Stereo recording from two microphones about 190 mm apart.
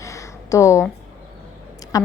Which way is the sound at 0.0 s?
15° left (ahead or behind).